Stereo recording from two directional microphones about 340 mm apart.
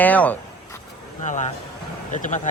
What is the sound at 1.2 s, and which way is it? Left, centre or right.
Speech, left.